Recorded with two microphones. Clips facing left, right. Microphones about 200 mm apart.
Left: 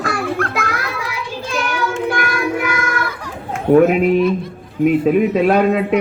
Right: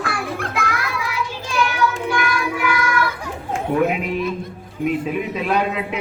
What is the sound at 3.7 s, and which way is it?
Speech, 50° left (ahead or behind).